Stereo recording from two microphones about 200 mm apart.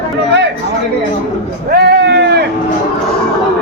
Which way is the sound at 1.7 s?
55° right (ahead or behind).